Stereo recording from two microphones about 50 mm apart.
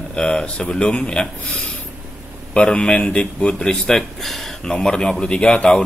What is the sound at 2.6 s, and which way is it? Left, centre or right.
A man's voice, left.